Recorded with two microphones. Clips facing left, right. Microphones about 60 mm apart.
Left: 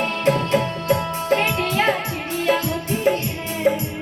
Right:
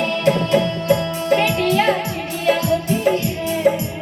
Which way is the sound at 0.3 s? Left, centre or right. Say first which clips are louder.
Right 2 dB; left.